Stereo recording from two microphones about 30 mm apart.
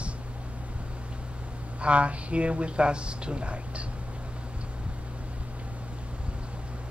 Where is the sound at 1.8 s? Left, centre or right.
Right.